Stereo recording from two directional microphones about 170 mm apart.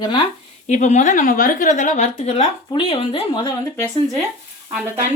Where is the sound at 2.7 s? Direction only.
30° left (ahead or behind).